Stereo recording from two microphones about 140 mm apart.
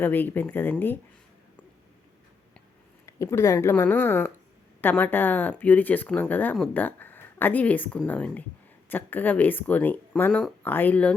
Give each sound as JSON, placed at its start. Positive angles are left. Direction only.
{"t": 0.0, "sound": "speech", "side_deg": 15}
{"t": 3.1, "sound": "speech", "side_deg": 20}